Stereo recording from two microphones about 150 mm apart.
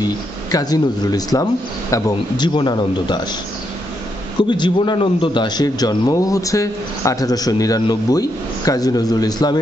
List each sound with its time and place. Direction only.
0.0 s a man's voice: 25° left (ahead or behind)
4.5 s a man's voice: 30° left (ahead or behind)